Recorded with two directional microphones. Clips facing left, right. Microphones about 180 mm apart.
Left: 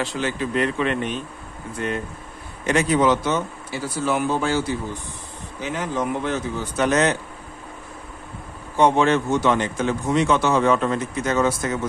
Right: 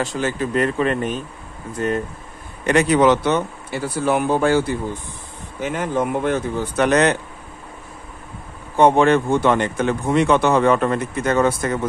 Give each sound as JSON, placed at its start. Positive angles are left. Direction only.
{"t": 0.0, "sound": "speech", "side_deg": -45}
{"t": 2.6, "sound": "speech", "side_deg": -65}
{"t": 8.7, "sound": "speech", "side_deg": -55}